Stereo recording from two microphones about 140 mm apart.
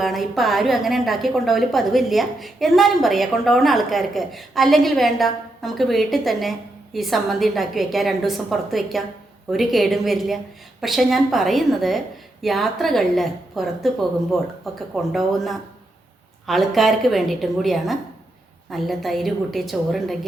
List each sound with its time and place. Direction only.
0.0 s a woman's voice: centre (ahead or behind)